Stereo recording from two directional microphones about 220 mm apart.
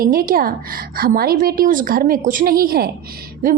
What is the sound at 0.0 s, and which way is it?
A woman's voice, 40° right (ahead or behind).